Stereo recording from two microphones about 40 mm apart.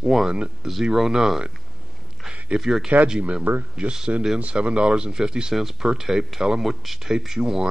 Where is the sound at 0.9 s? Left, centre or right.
Centre.